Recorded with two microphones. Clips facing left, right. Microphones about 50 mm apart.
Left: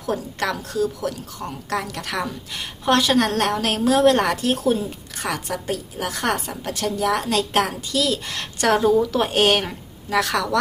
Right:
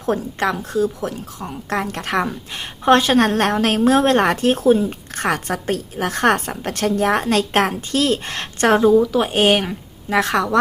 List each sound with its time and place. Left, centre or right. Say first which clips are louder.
0.0 s a woman's voice: right 4 dB; right
8.8 s speech: right 4 dB; centre
10.1 s a woman's voice: right 3 dB; right